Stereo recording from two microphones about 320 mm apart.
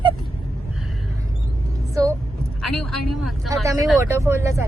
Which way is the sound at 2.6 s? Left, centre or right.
Centre.